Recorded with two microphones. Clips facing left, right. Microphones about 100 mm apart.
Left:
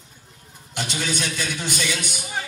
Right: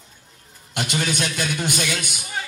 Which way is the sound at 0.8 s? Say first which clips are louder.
Right 3 dB; 55° right (ahead or behind).